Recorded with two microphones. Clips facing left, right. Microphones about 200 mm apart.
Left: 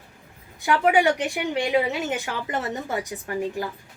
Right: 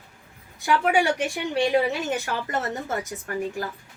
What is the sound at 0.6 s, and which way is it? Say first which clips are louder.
A woman's voice: left 2 dB; 20° left (ahead or behind).